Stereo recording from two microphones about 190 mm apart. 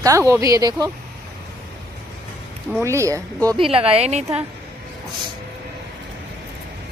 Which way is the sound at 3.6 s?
30° right (ahead or behind).